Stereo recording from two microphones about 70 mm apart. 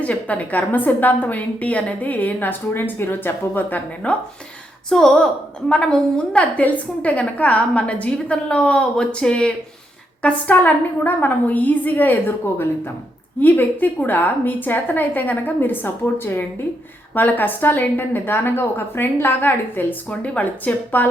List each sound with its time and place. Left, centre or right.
0.0 s a woman's voice: left
4.0 s a woman's voice: centre
13.4 s a woman's voice: left